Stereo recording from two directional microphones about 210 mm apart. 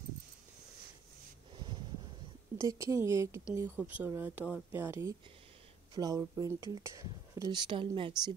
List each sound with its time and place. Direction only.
2.5 s speech: 15° right (ahead or behind)